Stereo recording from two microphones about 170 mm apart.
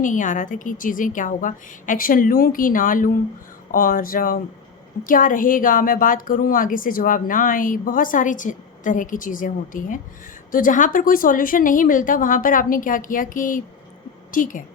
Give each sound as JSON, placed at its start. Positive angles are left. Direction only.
{"t": 0.0, "sound": "a woman's voice", "side_deg": 50}